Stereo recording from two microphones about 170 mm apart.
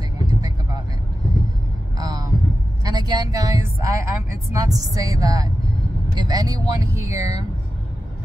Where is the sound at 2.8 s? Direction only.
25° right (ahead or behind).